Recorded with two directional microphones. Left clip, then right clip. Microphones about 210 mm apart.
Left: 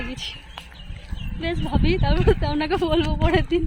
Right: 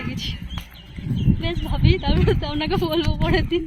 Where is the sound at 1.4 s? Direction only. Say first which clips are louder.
Left 1 dB; 25° left (ahead or behind).